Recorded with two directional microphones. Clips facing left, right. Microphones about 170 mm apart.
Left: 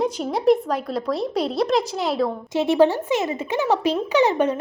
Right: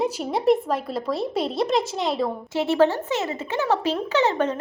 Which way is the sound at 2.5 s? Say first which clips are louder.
Left 2 dB; 15° left (ahead or behind).